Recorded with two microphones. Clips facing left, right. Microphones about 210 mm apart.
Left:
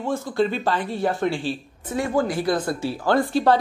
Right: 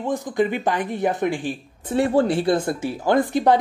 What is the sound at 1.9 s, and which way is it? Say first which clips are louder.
Speech: right 4 dB; 30° right (ahead or behind).